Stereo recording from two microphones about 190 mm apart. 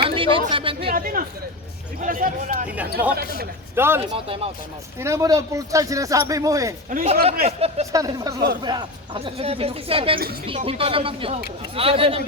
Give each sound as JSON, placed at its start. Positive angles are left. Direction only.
{"t": 0.1, "sound": "a sound", "side_deg": -30}
{"t": 0.5, "sound": "speech", "side_deg": -25}
{"t": 0.9, "sound": "speech", "side_deg": -50}
{"t": 2.6, "sound": "speech", "side_deg": -5}
{"t": 6.9, "sound": "speech", "side_deg": -35}
{"t": 7.9, "sound": "speech", "side_deg": -20}